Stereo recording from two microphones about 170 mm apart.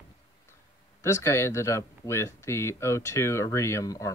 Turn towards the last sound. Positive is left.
turn(degrees=20)  # may be behind; listen again after turning